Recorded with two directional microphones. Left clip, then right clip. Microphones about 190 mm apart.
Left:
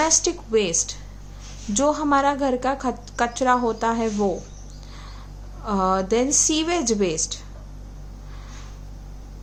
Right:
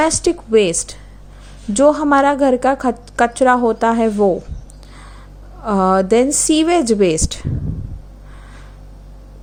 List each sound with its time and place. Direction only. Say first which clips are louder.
0.0 s a woman's voice: right 5 dB; 30° right (ahead or behind)
5.6 s a woman's voice: right 7 dB; 35° right (ahead or behind)